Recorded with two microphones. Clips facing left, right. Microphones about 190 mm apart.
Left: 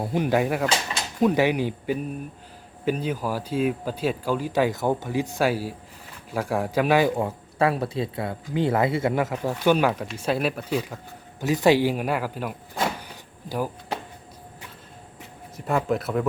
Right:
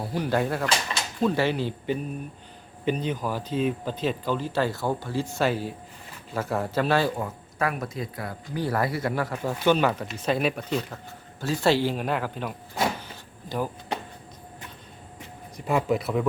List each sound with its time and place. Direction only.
0.0 s speech: 20° left (ahead or behind)
7.2 s speech: 30° left (ahead or behind); by 12.5 s 5° left (ahead or behind)
13.0 s drawer open or close: 10° left (ahead or behind)
15.5 s speech: centre (ahead or behind)